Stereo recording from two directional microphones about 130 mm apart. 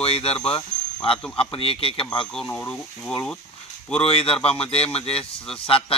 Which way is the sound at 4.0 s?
50° left (ahead or behind).